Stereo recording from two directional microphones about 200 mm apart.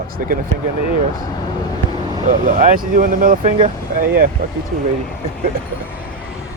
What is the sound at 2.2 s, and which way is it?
Speech, 40° right (ahead or behind).